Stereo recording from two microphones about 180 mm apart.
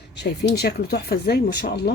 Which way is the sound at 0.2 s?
70° left (ahead or behind).